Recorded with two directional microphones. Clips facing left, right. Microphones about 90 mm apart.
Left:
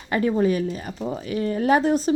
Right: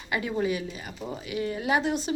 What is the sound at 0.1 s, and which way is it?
A woman's voice, 40° left (ahead or behind).